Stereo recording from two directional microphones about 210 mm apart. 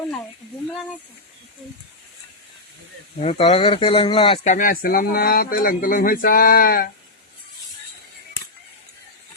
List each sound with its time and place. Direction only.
3.2 s speech: 30° left (ahead or behind)